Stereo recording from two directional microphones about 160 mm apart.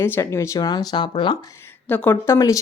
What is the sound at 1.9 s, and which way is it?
Speech, 10° left (ahead or behind).